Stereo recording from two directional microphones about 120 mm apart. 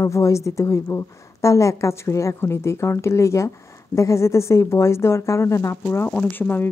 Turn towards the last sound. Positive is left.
turn(degrees=15)  # may be behind; listen again after turning